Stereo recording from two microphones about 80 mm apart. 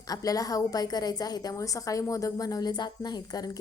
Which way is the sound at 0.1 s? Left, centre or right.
Left.